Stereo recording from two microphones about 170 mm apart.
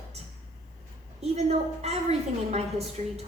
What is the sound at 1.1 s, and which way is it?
A woman's voice, 40° right (ahead or behind).